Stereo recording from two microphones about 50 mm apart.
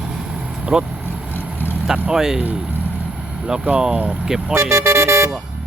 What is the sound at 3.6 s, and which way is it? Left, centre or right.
Speech, right.